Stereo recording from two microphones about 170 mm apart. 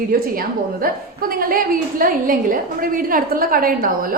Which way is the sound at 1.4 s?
55° right (ahead or behind).